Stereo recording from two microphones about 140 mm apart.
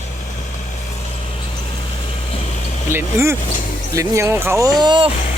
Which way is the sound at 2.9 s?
15° right (ahead or behind).